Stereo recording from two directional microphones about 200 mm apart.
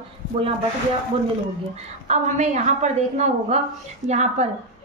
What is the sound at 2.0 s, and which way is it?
A woman's voice, 35° right (ahead or behind).